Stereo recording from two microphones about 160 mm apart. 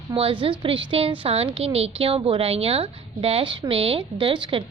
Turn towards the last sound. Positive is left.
turn(degrees=-30)  # may be behind; listen again after turning